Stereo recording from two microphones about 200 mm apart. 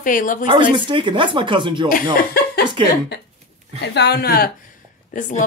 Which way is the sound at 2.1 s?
50° left (ahead or behind).